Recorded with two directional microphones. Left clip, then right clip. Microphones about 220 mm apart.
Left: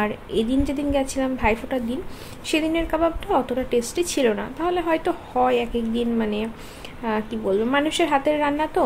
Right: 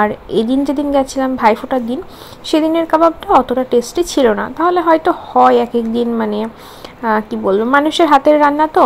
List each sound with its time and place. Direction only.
0.0 s a woman's voice: 25° right (ahead or behind)